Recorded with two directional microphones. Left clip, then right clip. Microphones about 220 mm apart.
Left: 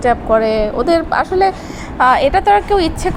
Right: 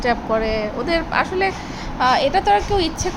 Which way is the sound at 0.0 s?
15° left (ahead or behind).